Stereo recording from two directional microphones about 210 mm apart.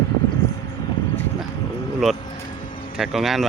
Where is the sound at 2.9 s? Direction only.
Centre (ahead or behind).